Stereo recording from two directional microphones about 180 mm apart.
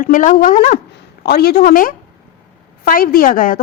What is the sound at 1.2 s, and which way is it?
A woman's voice, 60° left (ahead or behind).